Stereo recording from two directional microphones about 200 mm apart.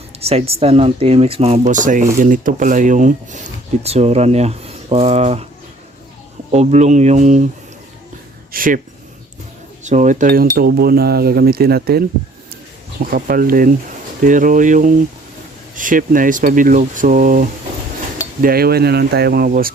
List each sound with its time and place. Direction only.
0.2 s speech: 30° right (ahead or behind)
6.5 s speech: 35° right (ahead or behind)
8.5 s speech: 45° right (ahead or behind)
9.8 s speech: 40° right (ahead or behind)
13.1 s speech: 45° right (ahead or behind)
18.4 s speech: 50° right (ahead or behind)